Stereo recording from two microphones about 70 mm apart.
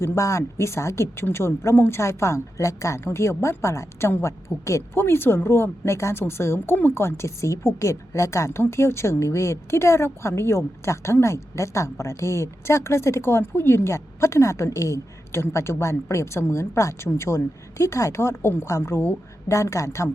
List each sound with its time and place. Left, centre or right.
0.0 s a woman's voice: left